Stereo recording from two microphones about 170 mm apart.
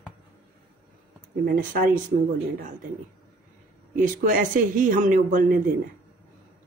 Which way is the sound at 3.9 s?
55° right (ahead or behind).